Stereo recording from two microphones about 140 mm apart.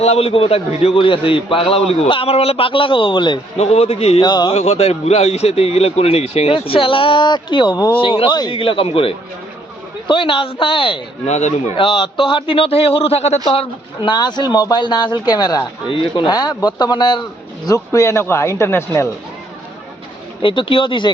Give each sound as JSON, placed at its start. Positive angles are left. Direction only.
{"t": 0.0, "sound": "a man's voice", "side_deg": 45}
{"t": 3.6, "sound": "speech", "side_deg": 50}
{"t": 4.2, "sound": "a man's voice", "side_deg": 30}
{"t": 4.5, "sound": "a man's voice", "side_deg": 50}
{"t": 11.3, "sound": "speech", "side_deg": 55}
{"t": 11.8, "sound": "a man's voice", "side_deg": 40}
{"t": 20.4, "sound": "a man's voice", "side_deg": 35}